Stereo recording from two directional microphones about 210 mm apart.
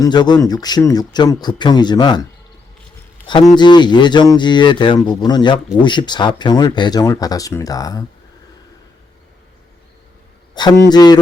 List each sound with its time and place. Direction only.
0.0 s speech: 20° left (ahead or behind)
3.5 s speech: 20° left (ahead or behind)
10.5 s speech: 20° left (ahead or behind)